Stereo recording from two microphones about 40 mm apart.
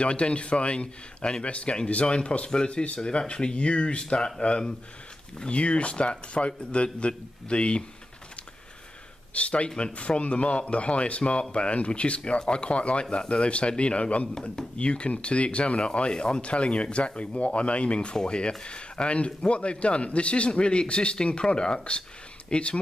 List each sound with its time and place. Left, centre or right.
0.0 s a man's voice: left
9.3 s a man's voice: left